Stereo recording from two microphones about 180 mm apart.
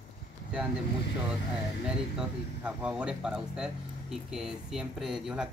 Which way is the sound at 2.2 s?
5° right (ahead or behind).